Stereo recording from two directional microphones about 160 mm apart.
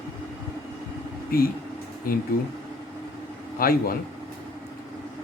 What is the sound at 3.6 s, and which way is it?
Speech, 65° left (ahead or behind).